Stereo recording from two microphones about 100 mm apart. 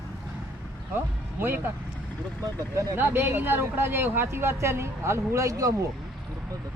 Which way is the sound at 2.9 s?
20° right (ahead or behind).